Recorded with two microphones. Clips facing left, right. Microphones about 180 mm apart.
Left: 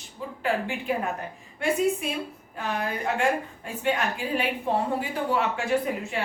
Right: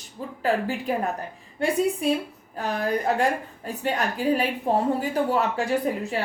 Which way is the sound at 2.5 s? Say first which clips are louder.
Right 4 dB; 40° right (ahead or behind).